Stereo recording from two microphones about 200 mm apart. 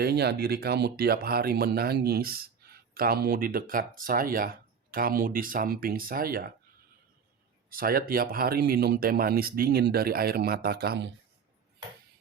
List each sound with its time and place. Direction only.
0.0 s speech: 55° right (ahead or behind)
7.7 s speech: 45° right (ahead or behind)